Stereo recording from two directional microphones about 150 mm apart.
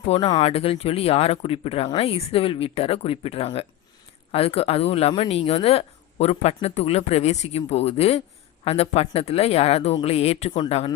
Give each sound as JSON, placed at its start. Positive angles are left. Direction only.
{"t": 0.0, "sound": "speech", "side_deg": 45}